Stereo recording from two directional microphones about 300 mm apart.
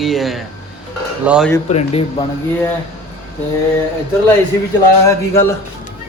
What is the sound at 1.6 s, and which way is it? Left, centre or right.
Speech, left.